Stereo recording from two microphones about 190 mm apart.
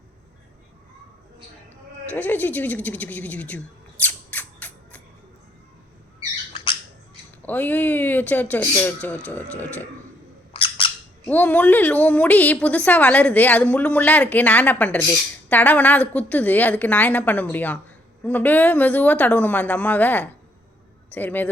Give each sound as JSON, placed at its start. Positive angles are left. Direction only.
{"t": 2.0, "sound": "a woman's voice", "side_deg": 10}
{"t": 4.0, "sound": "squawk", "side_deg": 10}
{"t": 7.4, "sound": "a woman's voice", "side_deg": 10}
{"t": 10.5, "sound": "squawk", "side_deg": 30}
{"t": 11.3, "sound": "a woman's voice", "side_deg": 10}